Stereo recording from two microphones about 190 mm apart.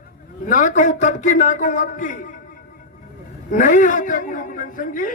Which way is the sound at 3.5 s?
40° left (ahead or behind).